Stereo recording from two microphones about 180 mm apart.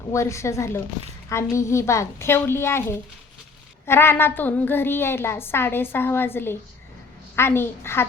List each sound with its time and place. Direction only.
0.1 s a woman's voice: 15° left (ahead or behind)